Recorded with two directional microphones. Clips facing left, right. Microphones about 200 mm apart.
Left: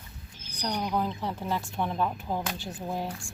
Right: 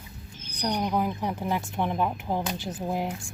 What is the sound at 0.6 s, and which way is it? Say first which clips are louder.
Speech: right 3 dB; 15° right (ahead or behind).